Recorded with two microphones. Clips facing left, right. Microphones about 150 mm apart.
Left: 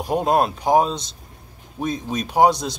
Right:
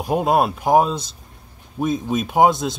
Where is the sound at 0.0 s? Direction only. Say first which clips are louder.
Right 1 dB; centre (ahead or behind).